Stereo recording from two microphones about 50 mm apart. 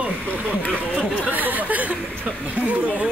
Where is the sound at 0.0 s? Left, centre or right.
Right.